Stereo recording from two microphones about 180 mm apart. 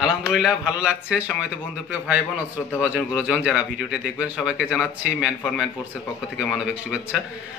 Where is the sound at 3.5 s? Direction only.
5° right (ahead or behind).